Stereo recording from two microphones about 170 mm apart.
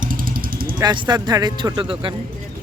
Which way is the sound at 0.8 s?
25° right (ahead or behind).